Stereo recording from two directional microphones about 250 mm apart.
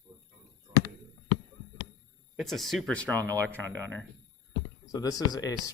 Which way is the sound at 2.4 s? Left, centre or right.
Centre.